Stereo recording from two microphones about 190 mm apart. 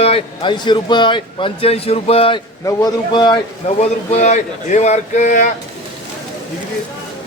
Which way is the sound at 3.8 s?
35° left (ahead or behind).